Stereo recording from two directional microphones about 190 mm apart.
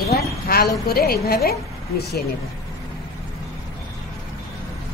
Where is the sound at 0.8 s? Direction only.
55° left (ahead or behind).